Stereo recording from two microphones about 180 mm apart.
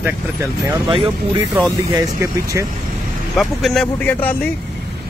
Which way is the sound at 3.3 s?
Centre (ahead or behind).